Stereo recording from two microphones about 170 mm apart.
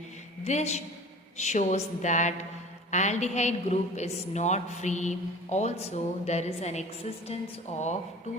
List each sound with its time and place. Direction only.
0.4 s a woman's voice: 40° left (ahead or behind)